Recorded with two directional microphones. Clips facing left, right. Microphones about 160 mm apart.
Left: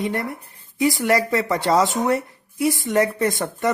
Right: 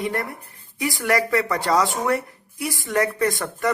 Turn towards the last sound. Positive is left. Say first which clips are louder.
# left 1 dB
turn(degrees=20)  # may be behind; listen again after turning